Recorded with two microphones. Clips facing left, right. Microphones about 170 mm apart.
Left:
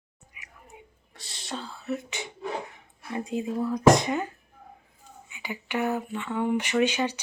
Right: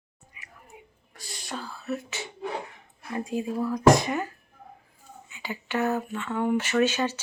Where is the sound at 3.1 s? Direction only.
20° left (ahead or behind).